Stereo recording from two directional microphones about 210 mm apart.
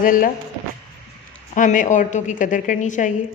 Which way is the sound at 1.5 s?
40° left (ahead or behind).